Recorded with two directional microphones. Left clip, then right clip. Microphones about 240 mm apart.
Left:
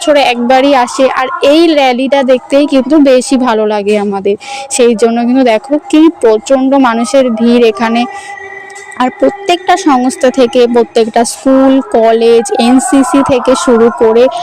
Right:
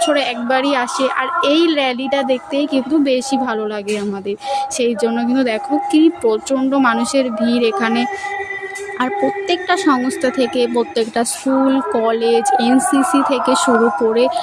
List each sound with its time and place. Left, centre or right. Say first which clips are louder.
0.0 s a woman's voice: left 9 dB; left